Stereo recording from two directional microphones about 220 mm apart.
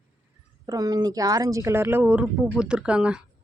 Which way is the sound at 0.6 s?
15° right (ahead or behind).